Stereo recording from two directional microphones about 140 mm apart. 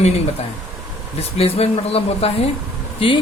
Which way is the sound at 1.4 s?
45° left (ahead or behind).